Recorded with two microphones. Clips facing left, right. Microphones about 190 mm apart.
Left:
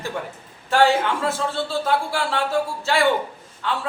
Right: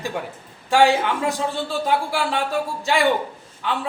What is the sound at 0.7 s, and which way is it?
Speech, 15° right (ahead or behind).